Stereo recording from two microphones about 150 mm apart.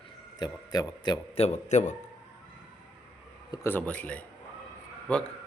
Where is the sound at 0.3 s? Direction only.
30° left (ahead or behind).